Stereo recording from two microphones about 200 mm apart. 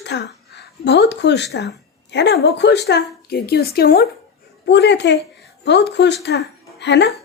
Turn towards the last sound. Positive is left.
turn(degrees=60)  # may be behind; listen again after turning